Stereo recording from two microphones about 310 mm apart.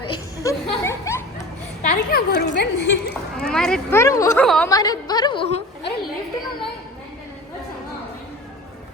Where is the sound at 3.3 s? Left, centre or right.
Centre.